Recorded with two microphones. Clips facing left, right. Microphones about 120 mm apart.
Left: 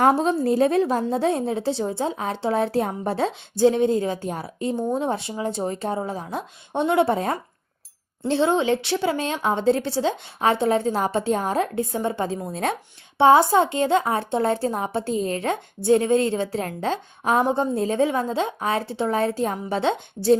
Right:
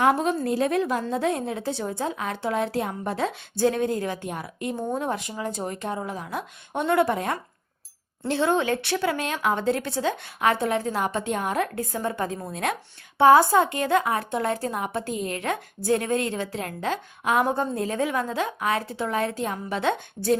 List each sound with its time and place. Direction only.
0.0 s a woman's voice: 30° left (ahead or behind)
3.6 s a woman's voice: 20° left (ahead or behind)